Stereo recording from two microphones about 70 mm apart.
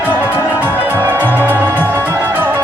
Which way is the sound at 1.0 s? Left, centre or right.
Right.